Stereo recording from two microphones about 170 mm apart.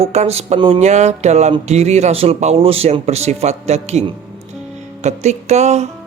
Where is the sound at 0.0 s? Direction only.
40° right (ahead or behind).